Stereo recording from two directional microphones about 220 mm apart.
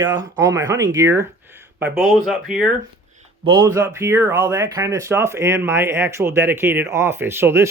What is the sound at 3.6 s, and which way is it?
Speech, 10° right (ahead or behind).